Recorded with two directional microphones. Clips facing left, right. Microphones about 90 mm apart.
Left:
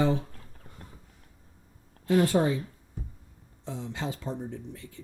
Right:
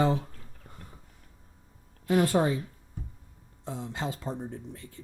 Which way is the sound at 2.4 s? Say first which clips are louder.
Even; 25° right (ahead or behind).